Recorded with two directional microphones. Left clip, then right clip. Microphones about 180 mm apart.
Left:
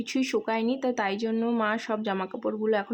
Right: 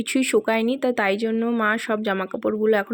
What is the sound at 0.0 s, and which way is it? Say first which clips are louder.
Speech: right 7 dB; 15° right (ahead or behind).